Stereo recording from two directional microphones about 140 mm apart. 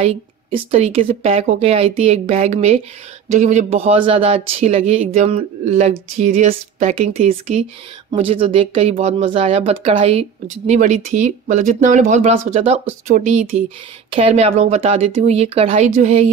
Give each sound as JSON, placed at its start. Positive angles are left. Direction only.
{"t": 0.0, "sound": "speech", "side_deg": -40}
{"t": 10.7, "sound": "speech", "side_deg": -60}